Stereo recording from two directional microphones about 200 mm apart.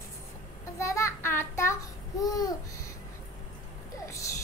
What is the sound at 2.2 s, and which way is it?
Babbling, 20° left (ahead or behind).